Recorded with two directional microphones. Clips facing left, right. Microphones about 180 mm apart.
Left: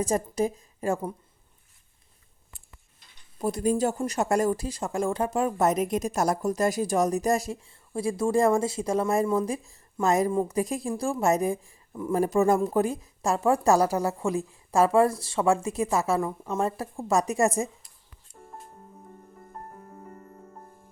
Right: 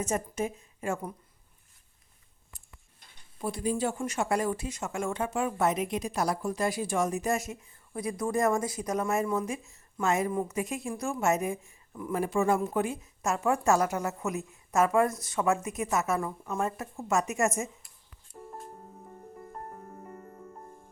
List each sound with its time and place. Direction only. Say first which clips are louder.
0.0 s speech: left 5 dB; 35° left (ahead or behind)
3.3 s speech: left 5 dB; 40° left (ahead or behind)
18.3 s music: right 4 dB; 60° right (ahead or behind)